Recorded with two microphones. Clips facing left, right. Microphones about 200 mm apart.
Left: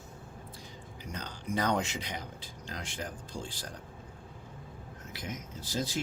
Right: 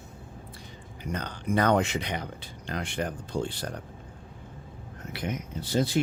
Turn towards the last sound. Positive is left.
turn(degrees=-65)  # may be behind; listen again after turning